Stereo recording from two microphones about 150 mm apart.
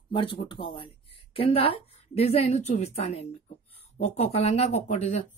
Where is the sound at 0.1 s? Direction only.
35° left (ahead or behind).